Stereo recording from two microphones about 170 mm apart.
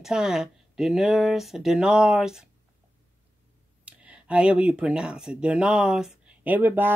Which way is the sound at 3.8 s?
5° right (ahead or behind).